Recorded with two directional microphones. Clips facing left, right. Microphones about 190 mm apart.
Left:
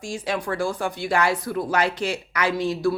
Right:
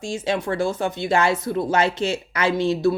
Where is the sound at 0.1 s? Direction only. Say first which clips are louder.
Right 3 dB; 25° right (ahead or behind).